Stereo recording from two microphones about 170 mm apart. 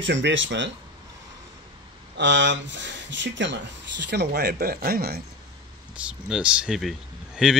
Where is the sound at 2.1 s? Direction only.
90° right.